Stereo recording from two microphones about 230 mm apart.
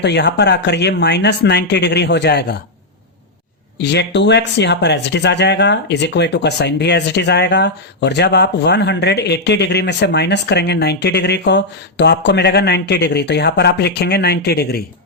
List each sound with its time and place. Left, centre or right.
0.0 s speech: left
3.8 s speech: left